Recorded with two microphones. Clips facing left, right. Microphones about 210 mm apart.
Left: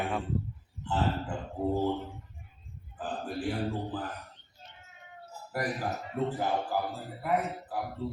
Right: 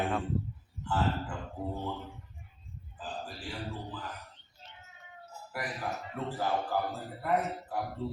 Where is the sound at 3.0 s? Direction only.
55° left (ahead or behind).